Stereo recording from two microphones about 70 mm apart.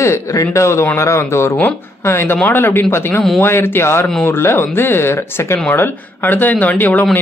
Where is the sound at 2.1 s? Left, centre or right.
Left.